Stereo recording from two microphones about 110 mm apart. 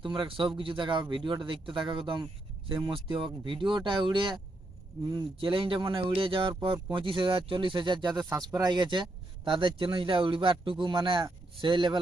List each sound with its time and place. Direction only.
0.0 s speech: 45° right (ahead or behind)